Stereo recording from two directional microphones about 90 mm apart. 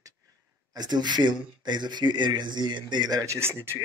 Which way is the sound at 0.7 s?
50° right (ahead or behind).